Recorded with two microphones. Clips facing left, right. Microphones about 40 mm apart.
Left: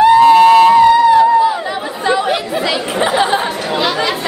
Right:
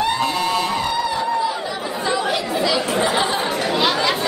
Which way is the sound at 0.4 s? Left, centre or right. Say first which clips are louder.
Left 14 dB; left.